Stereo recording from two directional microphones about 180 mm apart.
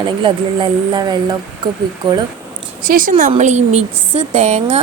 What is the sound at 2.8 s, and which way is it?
A woman's voice, 50° right (ahead or behind).